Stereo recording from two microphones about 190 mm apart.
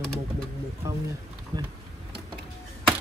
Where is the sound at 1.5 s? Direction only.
20° right (ahead or behind).